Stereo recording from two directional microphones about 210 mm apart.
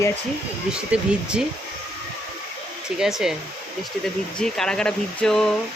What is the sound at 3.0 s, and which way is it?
Speech, centre (ahead or behind).